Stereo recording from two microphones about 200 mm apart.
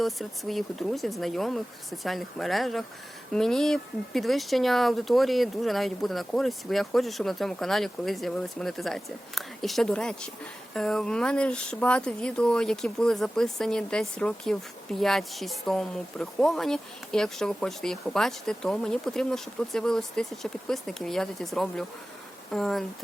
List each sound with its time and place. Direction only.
0.0 s speech: centre (ahead or behind)